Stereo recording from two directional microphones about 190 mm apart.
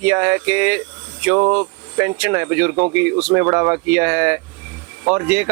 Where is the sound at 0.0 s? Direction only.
10° right (ahead or behind).